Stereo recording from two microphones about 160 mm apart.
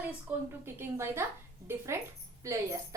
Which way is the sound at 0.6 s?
15° right (ahead or behind).